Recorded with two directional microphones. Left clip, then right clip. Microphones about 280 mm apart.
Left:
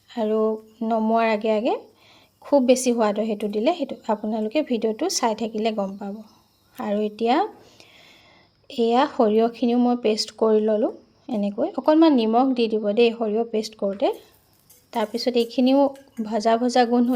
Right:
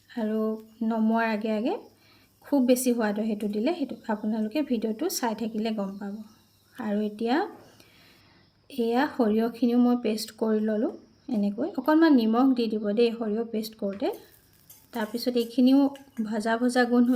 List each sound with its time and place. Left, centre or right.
0.1 s a woman's voice: left